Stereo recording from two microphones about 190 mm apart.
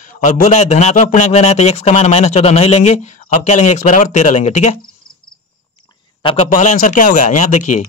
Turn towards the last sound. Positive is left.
turn(degrees=40)  # may be behind; listen again after turning